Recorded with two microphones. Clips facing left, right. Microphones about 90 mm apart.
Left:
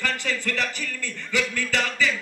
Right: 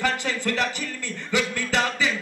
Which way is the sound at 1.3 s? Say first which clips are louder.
Right 2 dB; 20° right (ahead or behind).